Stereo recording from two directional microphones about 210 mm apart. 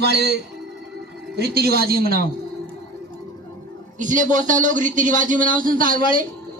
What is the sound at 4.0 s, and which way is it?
A man's voice, 35° right (ahead or behind).